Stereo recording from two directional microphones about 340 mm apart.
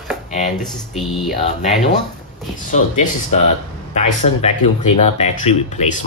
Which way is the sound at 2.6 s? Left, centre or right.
Left.